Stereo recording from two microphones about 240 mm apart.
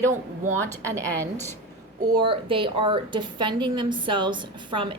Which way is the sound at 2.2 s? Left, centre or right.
Right.